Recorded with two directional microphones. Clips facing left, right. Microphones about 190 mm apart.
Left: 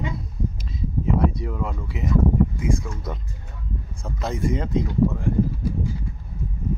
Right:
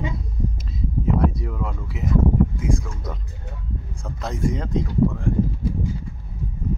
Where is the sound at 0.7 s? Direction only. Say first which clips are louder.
Right 1 dB; centre (ahead or behind).